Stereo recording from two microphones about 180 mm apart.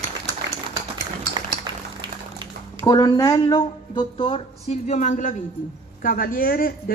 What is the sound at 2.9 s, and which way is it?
A woman's voice, 20° left (ahead or behind).